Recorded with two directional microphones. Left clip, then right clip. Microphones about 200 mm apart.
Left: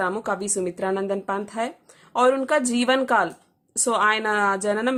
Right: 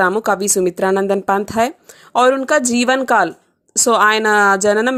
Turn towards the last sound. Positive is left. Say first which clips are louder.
# right 9 dB
turn(degrees=-35)  # may be behind; listen again after turning